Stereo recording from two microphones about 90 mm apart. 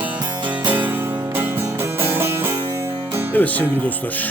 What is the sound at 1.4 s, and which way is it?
Music, 25° right (ahead or behind).